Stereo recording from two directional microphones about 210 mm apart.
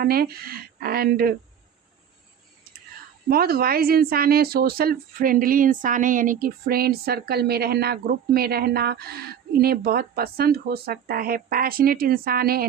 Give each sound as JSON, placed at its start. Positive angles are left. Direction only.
{"t": 0.0, "sound": "speech", "side_deg": -45}
{"t": 3.2, "sound": "speech", "side_deg": -45}